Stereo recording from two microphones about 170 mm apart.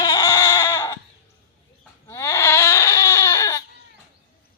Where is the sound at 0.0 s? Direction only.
20° left (ahead or behind).